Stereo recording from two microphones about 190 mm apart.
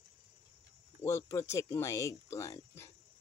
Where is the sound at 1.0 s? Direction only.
15° left (ahead or behind).